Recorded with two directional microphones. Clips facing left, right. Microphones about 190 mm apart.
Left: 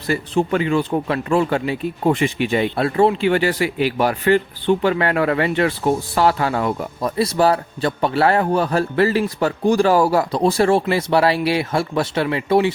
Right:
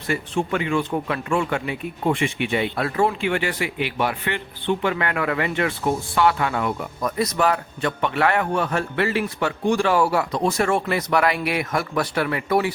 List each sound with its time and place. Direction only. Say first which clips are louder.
0.1 s speech: left 5 dB; 35° left (ahead or behind)